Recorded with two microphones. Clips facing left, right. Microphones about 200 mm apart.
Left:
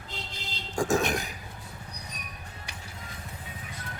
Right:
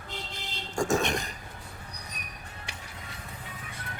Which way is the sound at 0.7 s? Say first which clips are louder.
Left 1 dB; centre (ahead or behind).